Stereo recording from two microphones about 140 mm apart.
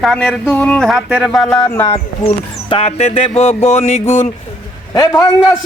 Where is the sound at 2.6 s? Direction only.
45° left (ahead or behind).